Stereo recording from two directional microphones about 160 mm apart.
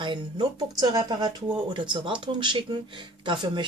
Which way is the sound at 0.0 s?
30° right (ahead or behind).